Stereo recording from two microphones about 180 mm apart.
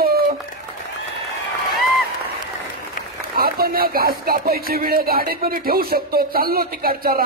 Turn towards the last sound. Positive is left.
turn(degrees=-55)  # may be behind; listen again after turning